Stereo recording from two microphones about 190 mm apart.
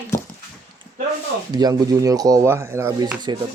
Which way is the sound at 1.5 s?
20° right (ahead or behind).